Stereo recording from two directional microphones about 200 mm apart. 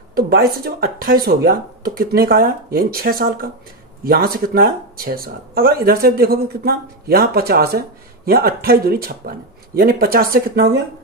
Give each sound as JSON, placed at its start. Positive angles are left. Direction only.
{"t": 0.1, "sound": "speech", "side_deg": -50}